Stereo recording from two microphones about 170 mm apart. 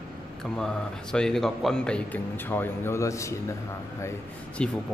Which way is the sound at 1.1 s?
5° left (ahead or behind).